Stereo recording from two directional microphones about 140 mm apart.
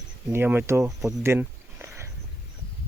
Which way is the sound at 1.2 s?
20° right (ahead or behind).